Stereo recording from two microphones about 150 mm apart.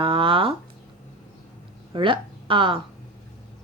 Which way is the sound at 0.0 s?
35° right (ahead or behind).